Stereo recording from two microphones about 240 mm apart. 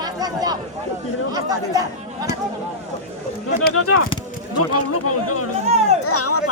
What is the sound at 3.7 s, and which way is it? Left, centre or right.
Speech, left.